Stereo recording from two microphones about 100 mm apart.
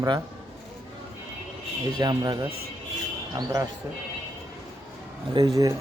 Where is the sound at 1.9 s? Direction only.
45° right (ahead or behind).